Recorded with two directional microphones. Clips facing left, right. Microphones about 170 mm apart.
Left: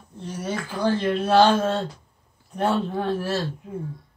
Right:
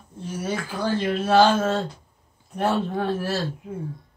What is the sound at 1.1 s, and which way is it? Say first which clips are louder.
A man's voice: right 1 dB; 5° right (ahead or behind).